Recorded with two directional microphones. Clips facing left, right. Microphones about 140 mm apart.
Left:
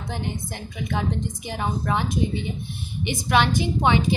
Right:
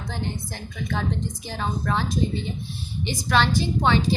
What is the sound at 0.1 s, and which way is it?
A woman's voice, 15° left (ahead or behind).